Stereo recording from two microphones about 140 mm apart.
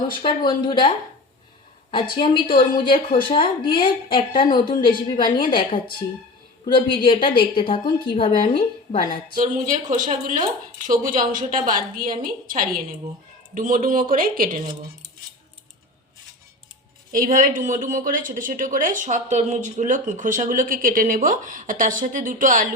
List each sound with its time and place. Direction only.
0.2 s a woman's voice: 35° left (ahead or behind)
9.3 s a woman's voice: 65° right (ahead or behind); by 12.8 s 85° right
13.5 s speech: 75° right (ahead or behind)
17.1 s speech: 80° right